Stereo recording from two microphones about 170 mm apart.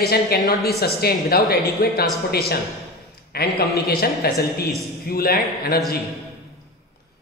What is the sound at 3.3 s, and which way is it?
A man's voice, 65° left (ahead or behind).